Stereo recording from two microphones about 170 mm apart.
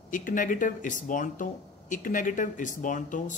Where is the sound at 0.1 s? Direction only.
50° left (ahead or behind).